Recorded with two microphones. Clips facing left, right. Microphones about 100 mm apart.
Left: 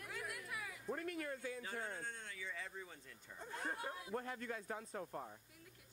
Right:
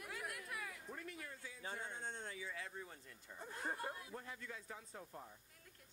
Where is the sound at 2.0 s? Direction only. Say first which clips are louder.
Right 2 dB; 25° right (ahead or behind).